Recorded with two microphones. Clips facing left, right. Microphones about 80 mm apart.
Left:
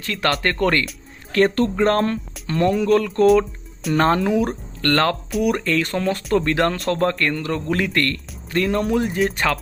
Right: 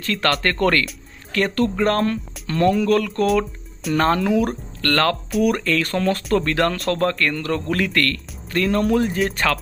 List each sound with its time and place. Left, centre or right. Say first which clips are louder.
0.0 s speech: right 1 dB; centre